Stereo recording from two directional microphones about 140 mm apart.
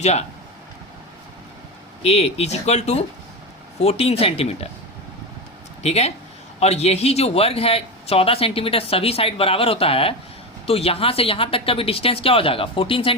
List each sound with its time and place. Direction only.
0.0 s a man's voice: 50° left (ahead or behind)
2.0 s a man's voice: 50° left (ahead or behind)
5.8 s a man's voice: 50° left (ahead or behind)